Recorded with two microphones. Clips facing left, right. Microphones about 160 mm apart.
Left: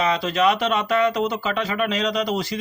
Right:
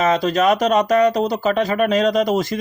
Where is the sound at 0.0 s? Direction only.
45° right (ahead or behind).